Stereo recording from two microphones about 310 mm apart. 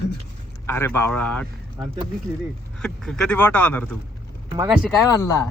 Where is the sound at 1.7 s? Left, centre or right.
Centre.